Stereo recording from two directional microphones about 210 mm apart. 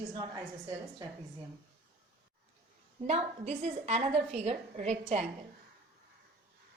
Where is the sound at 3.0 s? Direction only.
30° right (ahead or behind).